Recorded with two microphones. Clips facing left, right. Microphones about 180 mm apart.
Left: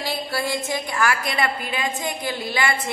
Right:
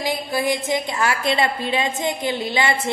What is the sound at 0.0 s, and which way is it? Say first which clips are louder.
A woman's voice: right 4 dB; 15° right (ahead or behind).